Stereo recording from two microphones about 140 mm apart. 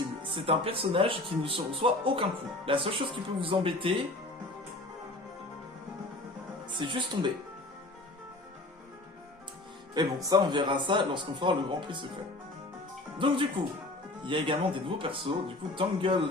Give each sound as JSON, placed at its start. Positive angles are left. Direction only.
{"t": 0.2, "sound": "speech", "side_deg": -35}
{"t": 6.7, "sound": "speech", "side_deg": -35}
{"t": 9.9, "sound": "speech", "side_deg": -30}
{"t": 13.1, "sound": "speech", "side_deg": -35}